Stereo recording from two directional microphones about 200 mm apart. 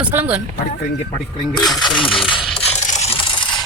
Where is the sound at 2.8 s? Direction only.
35° left (ahead or behind).